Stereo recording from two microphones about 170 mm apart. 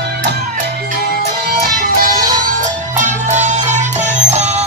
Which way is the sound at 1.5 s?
55° right (ahead or behind).